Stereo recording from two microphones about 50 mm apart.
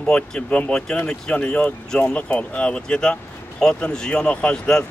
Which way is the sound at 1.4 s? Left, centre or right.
Left.